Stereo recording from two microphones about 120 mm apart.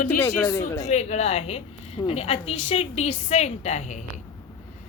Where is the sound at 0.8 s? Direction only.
70° left (ahead or behind).